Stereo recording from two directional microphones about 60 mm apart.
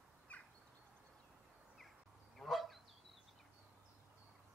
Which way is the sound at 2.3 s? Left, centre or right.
Centre.